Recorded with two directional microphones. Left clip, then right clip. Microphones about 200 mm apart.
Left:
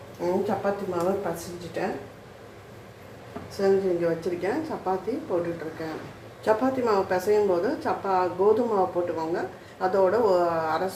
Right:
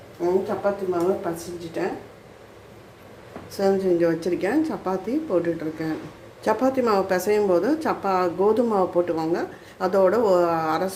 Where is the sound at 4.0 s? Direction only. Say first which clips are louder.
Right 4 dB; 50° right (ahead or behind).